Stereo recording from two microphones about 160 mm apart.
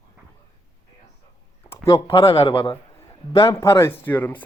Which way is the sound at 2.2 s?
35° left (ahead or behind).